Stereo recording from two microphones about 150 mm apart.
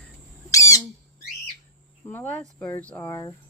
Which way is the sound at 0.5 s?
20° left (ahead or behind).